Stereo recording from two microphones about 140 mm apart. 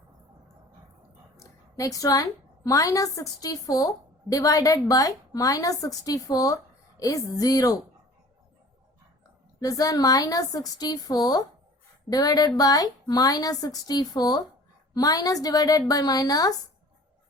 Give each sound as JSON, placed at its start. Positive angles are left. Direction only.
{"t": 1.4, "sound": "a sound", "side_deg": 20}
{"t": 2.6, "sound": "a woman's voice", "side_deg": 25}
{"t": 9.6, "sound": "a woman's voice", "side_deg": 25}